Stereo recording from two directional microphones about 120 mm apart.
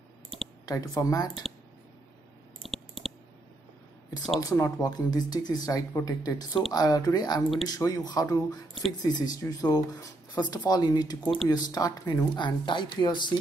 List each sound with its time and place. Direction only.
0.7 s speech: 30° left (ahead or behind)
2.6 s clicking: centre (ahead or behind)
4.4 s speech: 30° left (ahead or behind)
12.4 s speech: 40° left (ahead or behind)